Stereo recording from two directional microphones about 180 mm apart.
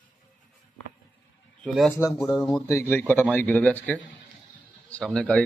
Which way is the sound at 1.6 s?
5° left (ahead or behind).